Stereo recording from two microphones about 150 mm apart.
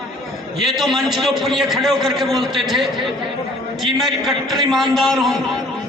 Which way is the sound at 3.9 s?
Centre (ahead or behind).